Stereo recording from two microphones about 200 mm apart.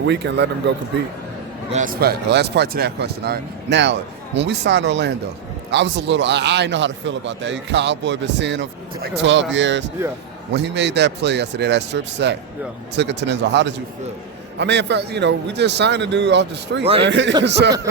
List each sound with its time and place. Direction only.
0.0 s a man's voice: 60° right (ahead or behind)
1.7 s a man's voice: 45° right (ahead or behind)